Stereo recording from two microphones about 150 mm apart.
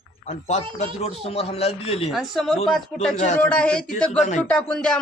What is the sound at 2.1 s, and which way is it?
Speech, centre (ahead or behind).